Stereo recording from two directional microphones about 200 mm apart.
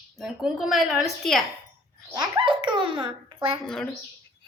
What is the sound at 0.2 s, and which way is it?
A woman's voice, centre (ahead or behind).